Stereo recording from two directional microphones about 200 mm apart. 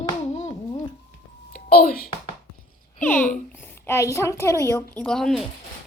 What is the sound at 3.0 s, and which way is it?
A child's voice, 10° left (ahead or behind).